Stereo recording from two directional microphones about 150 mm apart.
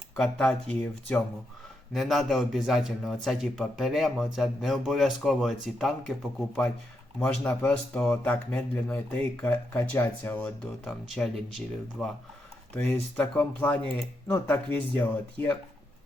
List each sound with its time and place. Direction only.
0.2 s a man's voice: 5° left (ahead or behind)
7.2 s speech: 10° left (ahead or behind)
10.4 s a man's voice: 5° left (ahead or behind)
12.7 s speech: 10° left (ahead or behind)